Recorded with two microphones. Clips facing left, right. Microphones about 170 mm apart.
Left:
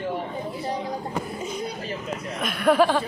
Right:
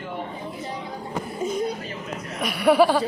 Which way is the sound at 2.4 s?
10° right (ahead or behind).